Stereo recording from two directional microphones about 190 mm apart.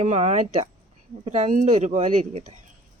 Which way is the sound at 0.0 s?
35° right (ahead or behind).